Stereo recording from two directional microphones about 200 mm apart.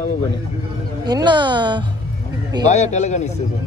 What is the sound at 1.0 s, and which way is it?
Speech, 20° right (ahead or behind).